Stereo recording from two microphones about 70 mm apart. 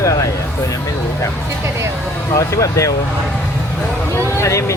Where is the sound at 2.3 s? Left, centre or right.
Left.